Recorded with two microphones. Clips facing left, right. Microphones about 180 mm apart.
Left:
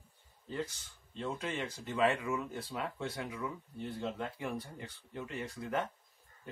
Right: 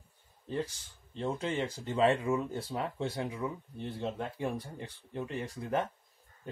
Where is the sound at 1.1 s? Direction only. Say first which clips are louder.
Right 5 dB; 25° right (ahead or behind).